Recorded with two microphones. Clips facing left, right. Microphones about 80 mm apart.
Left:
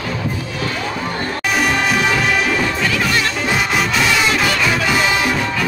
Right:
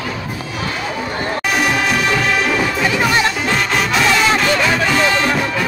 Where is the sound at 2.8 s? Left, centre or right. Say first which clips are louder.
Right 3 dB; right.